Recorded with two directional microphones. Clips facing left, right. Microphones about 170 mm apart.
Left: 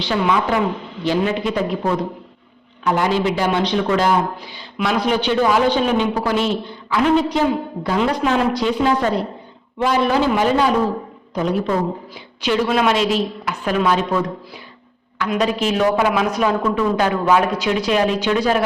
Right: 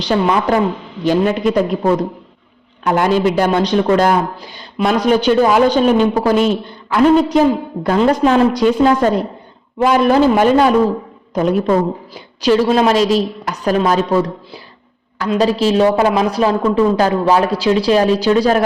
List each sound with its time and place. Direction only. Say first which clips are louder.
0.0 s a woman's voice: right 4 dB; 40° right (ahead or behind)
12.1 s a woman's voice: right 8 dB; 35° right (ahead or behind)